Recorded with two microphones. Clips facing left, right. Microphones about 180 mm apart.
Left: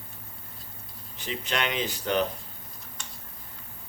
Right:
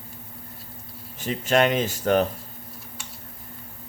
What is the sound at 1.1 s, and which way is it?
Speech, 45° right (ahead or behind).